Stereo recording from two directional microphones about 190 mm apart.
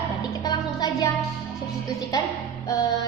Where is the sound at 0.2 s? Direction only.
20° left (ahead or behind).